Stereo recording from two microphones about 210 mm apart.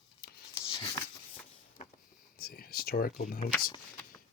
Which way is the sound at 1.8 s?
35° left (ahead or behind).